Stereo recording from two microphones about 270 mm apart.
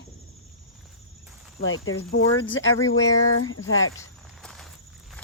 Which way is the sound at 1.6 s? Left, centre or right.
Left.